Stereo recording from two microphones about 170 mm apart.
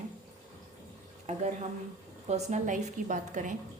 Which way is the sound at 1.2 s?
45° right (ahead or behind).